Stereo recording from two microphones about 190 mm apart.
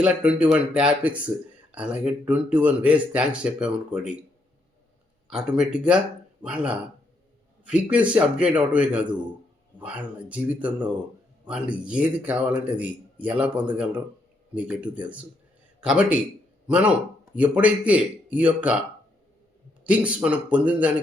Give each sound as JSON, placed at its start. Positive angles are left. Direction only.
{"t": 0.0, "sound": "a man's voice", "side_deg": -5}
{"t": 5.3, "sound": "a man's voice", "side_deg": -5}
{"t": 19.8, "sound": "a man's voice", "side_deg": -5}